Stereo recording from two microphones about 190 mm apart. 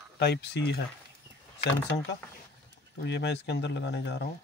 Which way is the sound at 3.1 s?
65° left (ahead or behind).